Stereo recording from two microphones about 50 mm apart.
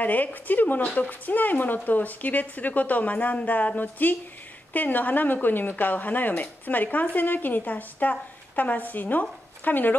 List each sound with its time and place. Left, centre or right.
0.0 s speech: left